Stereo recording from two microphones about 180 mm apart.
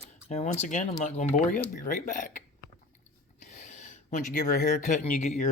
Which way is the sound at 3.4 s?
45° left (ahead or behind).